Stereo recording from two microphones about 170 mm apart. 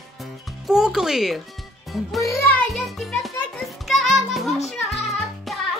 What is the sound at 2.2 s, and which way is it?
Speech, 15° left (ahead or behind).